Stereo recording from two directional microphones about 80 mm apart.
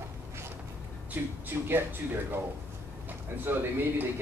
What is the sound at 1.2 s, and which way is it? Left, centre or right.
Speech, right.